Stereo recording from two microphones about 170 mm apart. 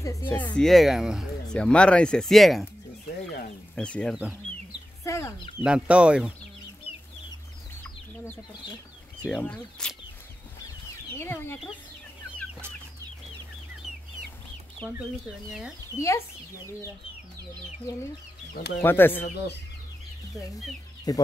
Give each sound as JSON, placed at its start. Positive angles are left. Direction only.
{"t": 0.0, "sound": "speech", "side_deg": 15}
{"t": 0.6, "sound": "speech", "side_deg": 0}
{"t": 3.7, "sound": "speech", "side_deg": 5}
{"t": 5.0, "sound": "chicken", "side_deg": 15}
{"t": 5.6, "sound": "speech", "side_deg": -5}
{"t": 9.2, "sound": "speech", "side_deg": 5}
{"t": 11.1, "sound": "speech", "side_deg": 15}
{"t": 14.8, "sound": "speech", "side_deg": 5}
{"t": 16.5, "sound": "speech", "side_deg": -15}
{"t": 18.8, "sound": "speech", "side_deg": 10}
{"t": 21.1, "sound": "speech", "side_deg": 20}